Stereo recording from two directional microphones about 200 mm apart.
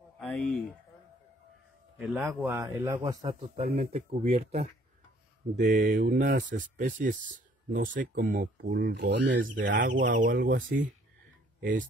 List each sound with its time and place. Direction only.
0.2 s speech: centre (ahead or behind)
2.0 s a man's voice: centre (ahead or behind)
2.4 s speech: 15° right (ahead or behind); by 9.4 s 60° right (ahead or behind)
9.7 s speech: 40° right (ahead or behind)